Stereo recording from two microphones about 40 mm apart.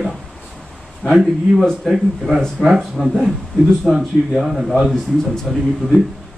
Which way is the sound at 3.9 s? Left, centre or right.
Centre.